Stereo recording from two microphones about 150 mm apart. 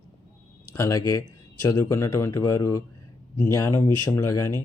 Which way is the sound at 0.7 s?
20° left (ahead or behind).